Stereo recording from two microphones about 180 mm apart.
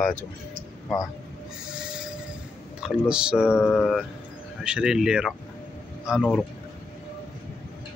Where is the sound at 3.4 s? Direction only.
10° left (ahead or behind).